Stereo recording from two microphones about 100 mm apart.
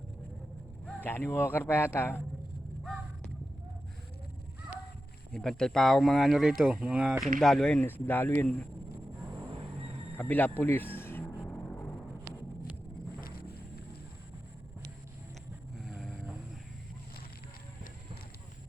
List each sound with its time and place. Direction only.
0.9 s speech: 20° left (ahead or behind)
5.3 s speech: 5° left (ahead or behind)
7.8 s speech: 20° left (ahead or behind)
10.2 s speech: 20° left (ahead or behind)
10.6 s a sound: 20° left (ahead or behind)
11.3 s music: 15° left (ahead or behind)
15.8 s vehicle: centre (ahead or behind)